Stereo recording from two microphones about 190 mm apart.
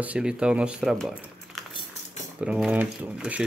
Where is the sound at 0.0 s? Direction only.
5° right (ahead or behind).